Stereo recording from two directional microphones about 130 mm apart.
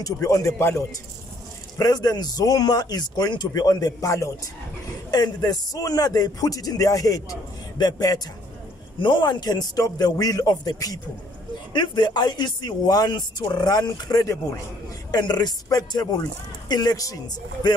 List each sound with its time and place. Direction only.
0.0 s speech: 25° left (ahead or behind)
1.8 s speech: 30° left (ahead or behind)